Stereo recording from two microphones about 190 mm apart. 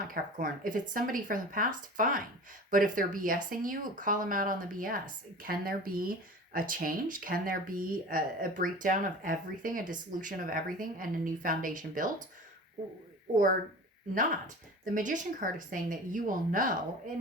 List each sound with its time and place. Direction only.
0.1 s speech: 45° right (ahead or behind)
14.1 s speech: 45° right (ahead or behind)